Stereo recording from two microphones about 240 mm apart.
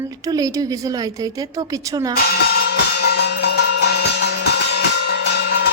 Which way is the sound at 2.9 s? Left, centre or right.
Left.